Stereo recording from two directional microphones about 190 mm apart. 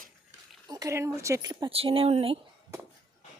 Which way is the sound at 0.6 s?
20° right (ahead or behind).